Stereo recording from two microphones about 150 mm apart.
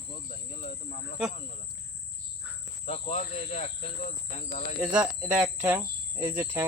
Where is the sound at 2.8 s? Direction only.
50° left (ahead or behind).